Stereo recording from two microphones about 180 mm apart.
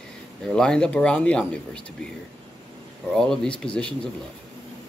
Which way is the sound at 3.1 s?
5° left (ahead or behind).